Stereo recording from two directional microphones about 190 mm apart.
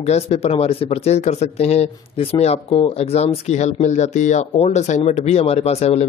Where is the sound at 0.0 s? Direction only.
35° left (ahead or behind).